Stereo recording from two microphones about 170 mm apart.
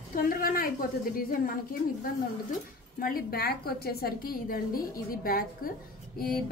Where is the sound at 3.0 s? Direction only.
60° left (ahead or behind).